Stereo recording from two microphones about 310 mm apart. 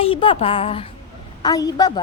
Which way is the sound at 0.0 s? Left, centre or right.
Centre.